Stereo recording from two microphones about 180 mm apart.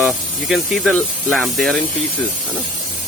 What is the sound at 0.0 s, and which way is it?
Speech, centre (ahead or behind).